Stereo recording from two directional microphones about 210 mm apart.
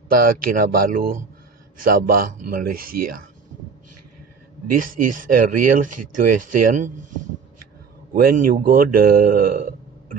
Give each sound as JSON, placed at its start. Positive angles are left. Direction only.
{"t": 0.5, "sound": "speech", "side_deg": -40}
{"t": 4.6, "sound": "speech", "side_deg": -40}
{"t": 8.1, "sound": "speech", "side_deg": -40}